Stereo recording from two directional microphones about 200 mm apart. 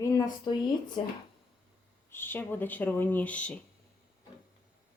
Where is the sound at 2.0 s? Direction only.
10° left (ahead or behind).